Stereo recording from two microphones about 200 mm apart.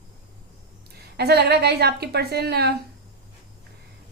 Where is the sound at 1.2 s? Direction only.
55° right (ahead or behind).